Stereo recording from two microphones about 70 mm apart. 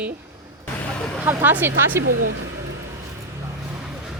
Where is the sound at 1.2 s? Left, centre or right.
Right.